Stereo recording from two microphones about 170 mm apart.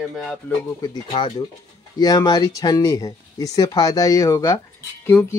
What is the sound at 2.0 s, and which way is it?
Speech, 25° left (ahead or behind).